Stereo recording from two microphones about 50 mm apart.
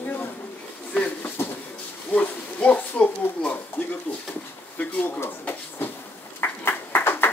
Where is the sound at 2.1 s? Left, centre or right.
Left.